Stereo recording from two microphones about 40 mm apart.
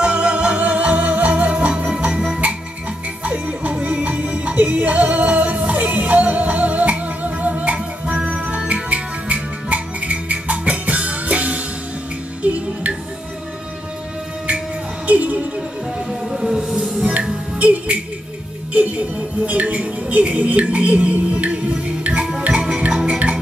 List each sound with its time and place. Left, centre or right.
0.0 s music: right
2.1 s music: centre
3.3 s music: right
15.0 s music: right
16.1 s music: centre
17.6 s music: right
18.7 s speech: right
22.8 s music: right